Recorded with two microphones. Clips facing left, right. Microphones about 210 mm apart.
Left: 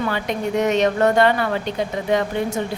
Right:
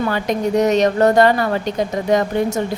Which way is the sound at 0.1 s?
40° right (ahead or behind).